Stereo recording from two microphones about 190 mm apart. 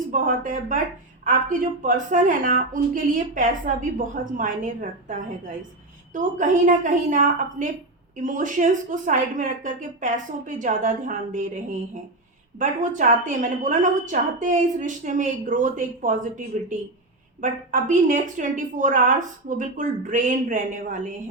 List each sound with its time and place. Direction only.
0.1 s a woman's voice: 45° right (ahead or behind)
12.5 s a woman's voice: 40° right (ahead or behind)